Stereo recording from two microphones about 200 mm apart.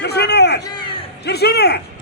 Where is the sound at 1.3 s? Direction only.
55° left (ahead or behind).